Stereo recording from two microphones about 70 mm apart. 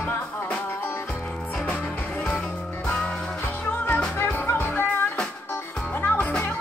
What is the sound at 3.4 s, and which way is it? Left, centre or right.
Music, left.